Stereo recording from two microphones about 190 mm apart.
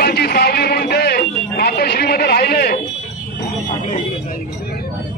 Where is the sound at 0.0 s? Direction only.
55° left (ahead or behind).